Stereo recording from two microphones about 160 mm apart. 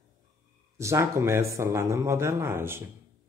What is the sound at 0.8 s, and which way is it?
Speech, 15° right (ahead or behind).